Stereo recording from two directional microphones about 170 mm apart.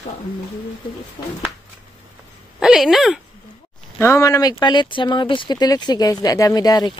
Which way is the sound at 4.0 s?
15° left (ahead or behind).